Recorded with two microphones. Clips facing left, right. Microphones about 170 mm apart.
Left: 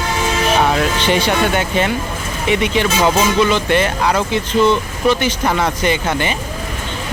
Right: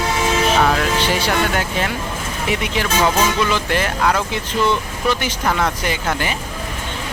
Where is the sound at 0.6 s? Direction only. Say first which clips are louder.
Left 3 dB; 10° left (ahead or behind).